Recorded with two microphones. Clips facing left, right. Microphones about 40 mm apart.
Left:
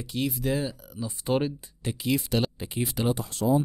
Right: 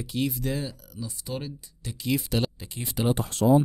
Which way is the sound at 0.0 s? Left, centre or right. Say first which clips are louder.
Even; centre.